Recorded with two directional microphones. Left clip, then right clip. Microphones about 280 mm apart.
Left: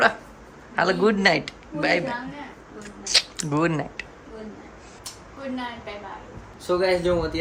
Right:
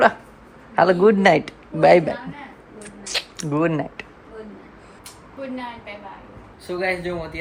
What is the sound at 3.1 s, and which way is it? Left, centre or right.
Speech, centre.